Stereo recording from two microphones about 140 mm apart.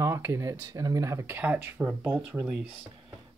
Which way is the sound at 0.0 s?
20° right (ahead or behind).